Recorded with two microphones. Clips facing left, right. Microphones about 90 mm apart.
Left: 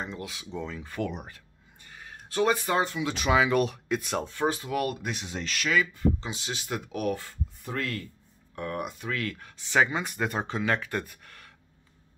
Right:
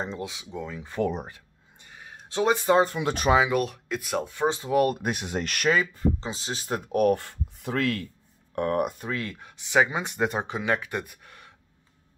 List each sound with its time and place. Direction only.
0.0 s speech: 30° right (ahead or behind)
0.3 s speech: 15° right (ahead or behind)
1.0 s speech: 35° right (ahead or behind)
1.3 s a sound: 15° right (ahead or behind)
2.8 s speech: 45° right (ahead or behind)
3.4 s speech: centre (ahead or behind)
4.6 s speech: 30° right (ahead or behind)
4.8 s speech: 50° right (ahead or behind)
5.7 s speech: 35° right (ahead or behind); by 8.1 s 80° right
8.5 s speech: 55° right (ahead or behind)
9.1 s speech: 20° right (ahead or behind)